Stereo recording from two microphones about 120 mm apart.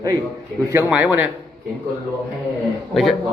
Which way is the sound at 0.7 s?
15° right (ahead or behind).